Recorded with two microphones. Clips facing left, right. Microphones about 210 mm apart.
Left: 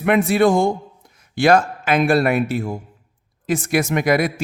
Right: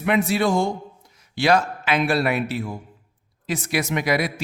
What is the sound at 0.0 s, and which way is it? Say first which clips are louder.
A man's voice: left 5 dB; 55° left (ahead or behind).